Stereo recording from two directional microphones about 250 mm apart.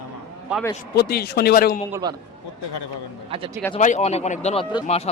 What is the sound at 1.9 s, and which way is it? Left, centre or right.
Speech, centre.